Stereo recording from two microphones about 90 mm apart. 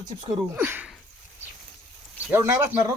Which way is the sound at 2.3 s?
25° right (ahead or behind).